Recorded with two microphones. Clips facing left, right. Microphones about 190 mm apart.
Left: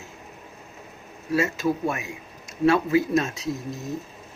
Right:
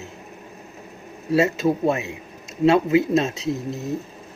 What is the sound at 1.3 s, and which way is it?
Speech, 25° right (ahead or behind).